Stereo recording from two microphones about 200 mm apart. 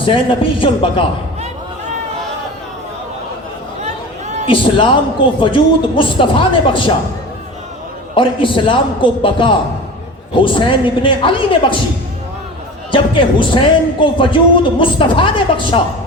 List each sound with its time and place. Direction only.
0.0 s a man's voice: 25° left (ahead or behind)
3.8 s a sound: 35° right (ahead or behind)
4.4 s a man's voice: 25° left (ahead or behind)
8.1 s a man's voice: 25° left (ahead or behind)
12.9 s a man's voice: 25° left (ahead or behind)